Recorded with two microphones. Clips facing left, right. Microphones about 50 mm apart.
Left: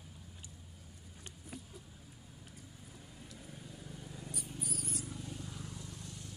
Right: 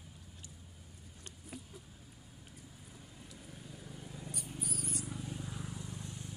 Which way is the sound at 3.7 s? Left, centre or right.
Centre.